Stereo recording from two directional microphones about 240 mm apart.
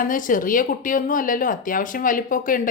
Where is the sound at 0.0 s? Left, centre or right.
Left.